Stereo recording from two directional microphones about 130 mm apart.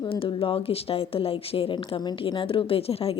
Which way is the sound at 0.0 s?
40° left (ahead or behind).